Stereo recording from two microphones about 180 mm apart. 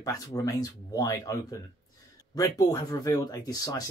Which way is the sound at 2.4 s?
20° left (ahead or behind).